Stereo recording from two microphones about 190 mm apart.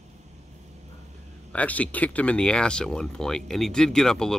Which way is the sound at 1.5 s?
10° left (ahead or behind).